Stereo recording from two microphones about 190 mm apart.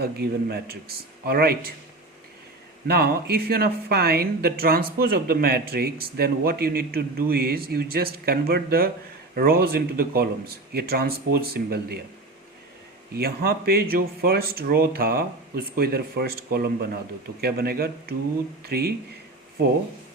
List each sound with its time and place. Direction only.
0.0 s speech: 55° right (ahead or behind)
2.8 s speech: 55° right (ahead or behind)
13.1 s speech: 55° right (ahead or behind)